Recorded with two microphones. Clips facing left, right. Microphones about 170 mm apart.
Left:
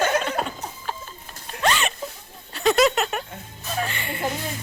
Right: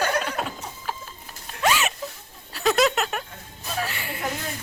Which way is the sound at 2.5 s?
Centre (ahead or behind).